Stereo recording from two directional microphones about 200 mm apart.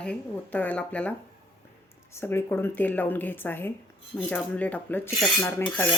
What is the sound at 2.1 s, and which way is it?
Speech, 10° left (ahead or behind).